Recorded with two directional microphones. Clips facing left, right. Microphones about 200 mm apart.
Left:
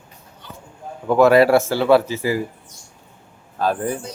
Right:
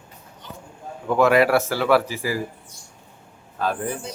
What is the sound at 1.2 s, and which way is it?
Speech, 30° left (ahead or behind).